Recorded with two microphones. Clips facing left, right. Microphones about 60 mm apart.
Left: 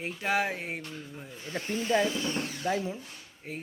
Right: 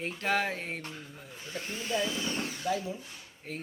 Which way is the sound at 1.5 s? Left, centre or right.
Left.